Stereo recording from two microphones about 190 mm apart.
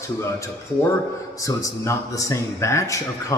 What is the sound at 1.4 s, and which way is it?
A man's voice, 15° left (ahead or behind).